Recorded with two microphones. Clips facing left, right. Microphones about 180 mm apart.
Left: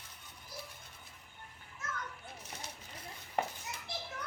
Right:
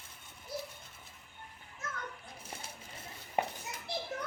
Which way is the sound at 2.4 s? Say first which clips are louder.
Right 1 dB; 30° right (ahead or behind).